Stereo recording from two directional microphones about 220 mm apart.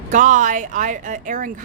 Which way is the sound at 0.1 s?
35° right (ahead or behind).